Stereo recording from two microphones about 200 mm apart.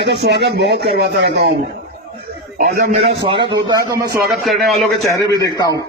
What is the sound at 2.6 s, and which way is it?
Speech, 45° right (ahead or behind).